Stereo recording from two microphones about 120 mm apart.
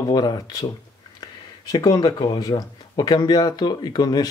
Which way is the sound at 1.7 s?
30° left (ahead or behind).